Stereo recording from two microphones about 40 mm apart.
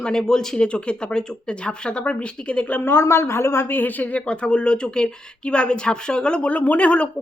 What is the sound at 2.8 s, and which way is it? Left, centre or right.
A woman's voice, left.